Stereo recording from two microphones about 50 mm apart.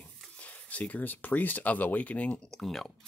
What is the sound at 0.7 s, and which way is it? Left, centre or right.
Speech, left.